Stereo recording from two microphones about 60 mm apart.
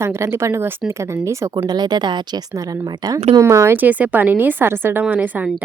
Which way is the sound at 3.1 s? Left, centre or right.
Right.